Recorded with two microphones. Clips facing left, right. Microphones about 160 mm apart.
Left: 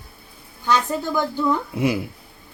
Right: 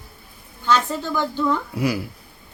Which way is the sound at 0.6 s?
15° left (ahead or behind).